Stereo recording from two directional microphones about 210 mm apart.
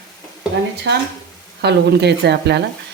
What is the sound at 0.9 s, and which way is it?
Speech, 60° right (ahead or behind).